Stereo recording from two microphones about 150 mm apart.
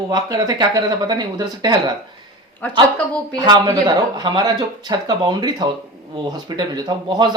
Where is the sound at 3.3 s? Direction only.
30° right (ahead or behind).